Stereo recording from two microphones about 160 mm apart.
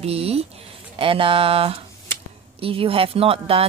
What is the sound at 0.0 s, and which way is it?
Speech, 40° right (ahead or behind).